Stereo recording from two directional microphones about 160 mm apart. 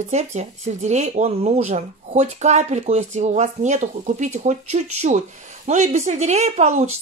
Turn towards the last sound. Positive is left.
turn(degrees=-45)  # may be behind; listen again after turning